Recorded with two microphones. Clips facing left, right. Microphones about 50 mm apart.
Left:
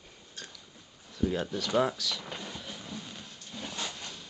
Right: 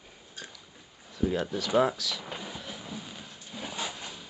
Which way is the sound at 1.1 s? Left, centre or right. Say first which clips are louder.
Right 2 dB; centre.